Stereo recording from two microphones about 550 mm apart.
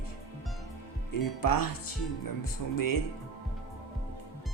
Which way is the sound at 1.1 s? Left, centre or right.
Left.